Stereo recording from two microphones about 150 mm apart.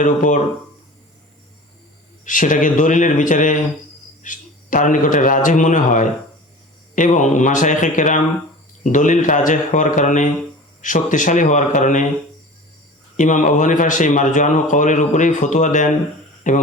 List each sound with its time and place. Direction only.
0.0 s speech: 60° left (ahead or behind)
2.2 s speech: 60° left (ahead or behind)
13.1 s speech: 55° left (ahead or behind)